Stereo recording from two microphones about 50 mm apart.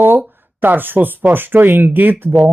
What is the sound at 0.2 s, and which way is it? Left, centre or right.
Speech, right.